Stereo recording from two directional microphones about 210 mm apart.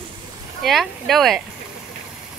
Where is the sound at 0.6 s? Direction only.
Centre (ahead or behind).